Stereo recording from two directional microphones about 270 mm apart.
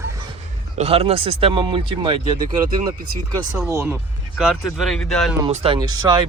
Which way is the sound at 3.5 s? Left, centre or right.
Centre.